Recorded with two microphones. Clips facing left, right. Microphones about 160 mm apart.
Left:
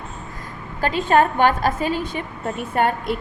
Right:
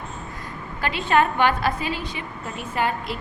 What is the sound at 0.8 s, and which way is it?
A woman's voice, 40° left (ahead or behind).